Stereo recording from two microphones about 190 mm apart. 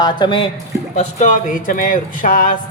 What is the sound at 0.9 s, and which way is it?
Speech, 40° left (ahead or behind).